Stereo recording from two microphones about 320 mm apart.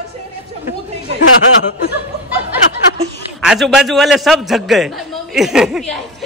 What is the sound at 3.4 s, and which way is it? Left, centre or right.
A man's voice, centre.